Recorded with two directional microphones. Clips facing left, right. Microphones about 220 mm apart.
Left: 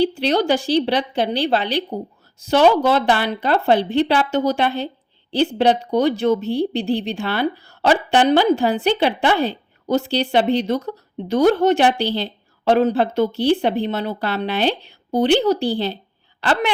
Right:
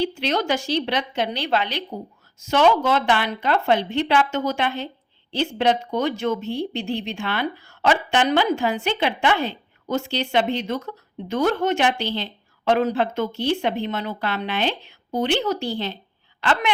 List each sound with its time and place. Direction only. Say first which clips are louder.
0.0 s speech: left 5 dB; 35° left (ahead or behind)